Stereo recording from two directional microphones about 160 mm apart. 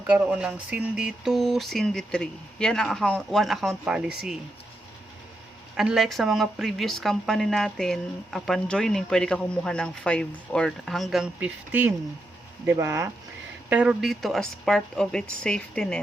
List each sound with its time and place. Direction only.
0.1 s speech: 5° right (ahead or behind)
5.7 s speech: 5° right (ahead or behind)
13.7 s speech: 10° right (ahead or behind)